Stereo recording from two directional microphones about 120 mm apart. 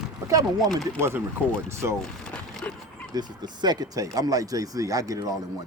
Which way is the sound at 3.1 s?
35° right (ahead or behind).